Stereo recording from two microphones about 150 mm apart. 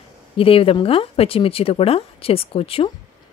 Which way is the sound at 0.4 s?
40° left (ahead or behind).